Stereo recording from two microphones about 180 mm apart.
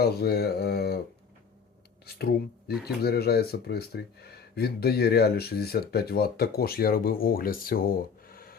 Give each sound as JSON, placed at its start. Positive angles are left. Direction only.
{"t": 0.0, "sound": "speech", "side_deg": 60}
{"t": 2.1, "sound": "speech", "side_deg": 60}